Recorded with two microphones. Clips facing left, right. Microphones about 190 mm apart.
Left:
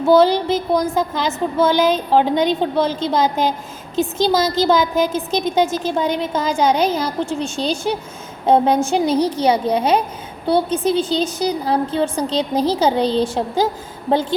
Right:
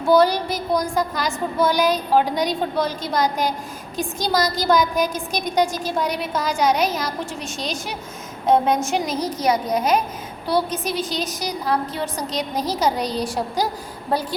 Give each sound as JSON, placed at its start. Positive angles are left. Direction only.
{"t": 0.3, "sound": "a woman's voice", "side_deg": 25}